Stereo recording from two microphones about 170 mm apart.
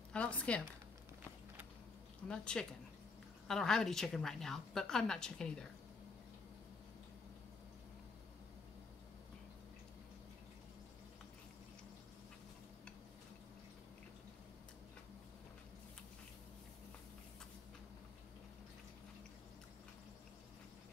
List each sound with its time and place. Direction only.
0.1 s speech: 5° left (ahead or behind)
2.2 s a woman's voice: 5° left (ahead or behind)